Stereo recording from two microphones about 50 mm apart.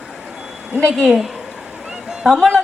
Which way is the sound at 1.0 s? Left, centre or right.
Centre.